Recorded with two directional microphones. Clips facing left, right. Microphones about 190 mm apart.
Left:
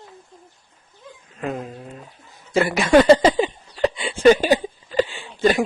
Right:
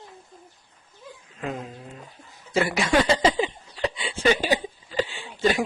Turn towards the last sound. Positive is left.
turn(degrees=50)  # may be behind; listen again after turning